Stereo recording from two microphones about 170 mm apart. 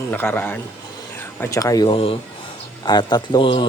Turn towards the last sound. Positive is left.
turn(degrees=30)  # may be behind; listen again after turning